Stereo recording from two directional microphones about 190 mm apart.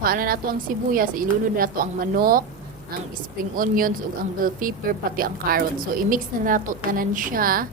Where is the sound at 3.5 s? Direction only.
45° right (ahead or behind).